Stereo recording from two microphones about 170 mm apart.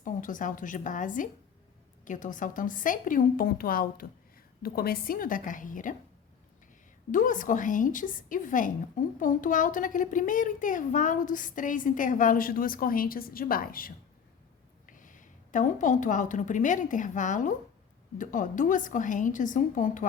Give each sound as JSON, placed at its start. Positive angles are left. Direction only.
{"t": 0.0, "sound": "a woman's voice", "side_deg": 50}
{"t": 7.1, "sound": "a woman's voice", "side_deg": 50}